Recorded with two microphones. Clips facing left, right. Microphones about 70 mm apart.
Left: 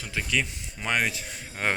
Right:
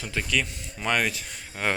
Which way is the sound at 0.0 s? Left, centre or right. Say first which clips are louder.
Right 2 dB; centre.